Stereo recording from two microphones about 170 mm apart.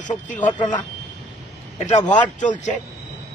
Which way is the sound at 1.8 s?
45° left (ahead or behind).